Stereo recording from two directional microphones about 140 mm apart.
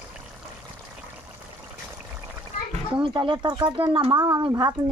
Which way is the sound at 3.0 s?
35° right (ahead or behind).